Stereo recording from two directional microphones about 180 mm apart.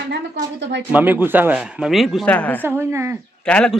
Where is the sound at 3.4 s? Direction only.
5° left (ahead or behind).